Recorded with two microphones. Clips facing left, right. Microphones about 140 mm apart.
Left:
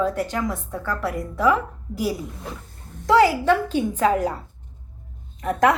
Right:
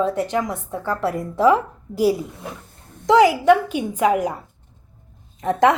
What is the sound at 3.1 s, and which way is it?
A woman's voice, 15° right (ahead or behind).